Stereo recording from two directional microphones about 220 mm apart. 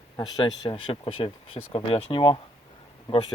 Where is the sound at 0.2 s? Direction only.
15° left (ahead or behind).